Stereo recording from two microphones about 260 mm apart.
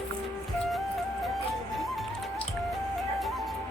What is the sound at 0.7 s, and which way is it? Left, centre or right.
Music, centre.